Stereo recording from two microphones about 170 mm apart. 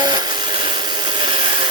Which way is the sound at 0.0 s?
25° right (ahead or behind).